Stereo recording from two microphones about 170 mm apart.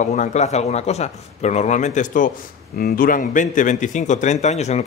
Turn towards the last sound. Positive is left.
turn(degrees=40)  # may be behind; listen again after turning